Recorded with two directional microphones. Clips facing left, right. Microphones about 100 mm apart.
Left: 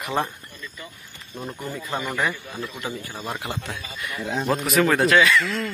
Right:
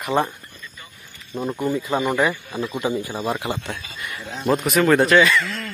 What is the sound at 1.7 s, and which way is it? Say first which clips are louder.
Speech: right 5 dB; centre (ahead or behind).